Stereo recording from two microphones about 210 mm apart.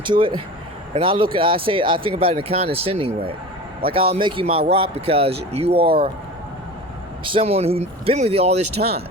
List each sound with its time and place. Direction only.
0.0 s speech: 20° right (ahead or behind)
7.3 s speech: 25° right (ahead or behind)